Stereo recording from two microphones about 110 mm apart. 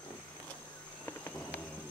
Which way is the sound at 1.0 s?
15° left (ahead or behind).